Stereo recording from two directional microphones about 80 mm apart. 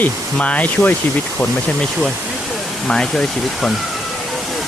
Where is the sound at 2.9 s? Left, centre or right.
Centre.